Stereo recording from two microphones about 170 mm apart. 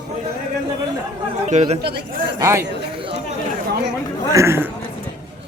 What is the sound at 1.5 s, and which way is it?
Speech, 40° right (ahead or behind).